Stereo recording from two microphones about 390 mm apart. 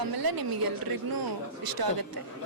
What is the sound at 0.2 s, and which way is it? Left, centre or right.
Speech, right.